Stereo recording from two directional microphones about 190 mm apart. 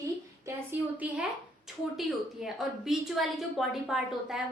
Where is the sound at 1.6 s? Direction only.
Centre (ahead or behind).